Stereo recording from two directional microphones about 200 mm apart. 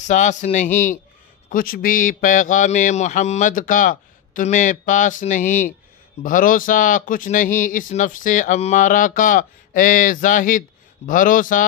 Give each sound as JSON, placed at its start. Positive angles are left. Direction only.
{"t": 0.0, "sound": "speech", "side_deg": 40}